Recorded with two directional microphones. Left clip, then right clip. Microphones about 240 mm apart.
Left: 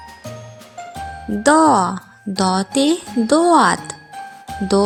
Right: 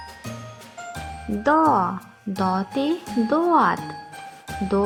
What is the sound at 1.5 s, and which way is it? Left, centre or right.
Speech, left.